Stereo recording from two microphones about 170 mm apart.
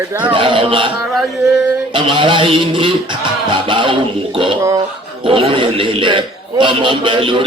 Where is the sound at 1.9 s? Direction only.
30° right (ahead or behind).